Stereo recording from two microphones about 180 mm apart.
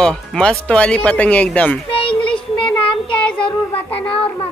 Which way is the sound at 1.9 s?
30° left (ahead or behind).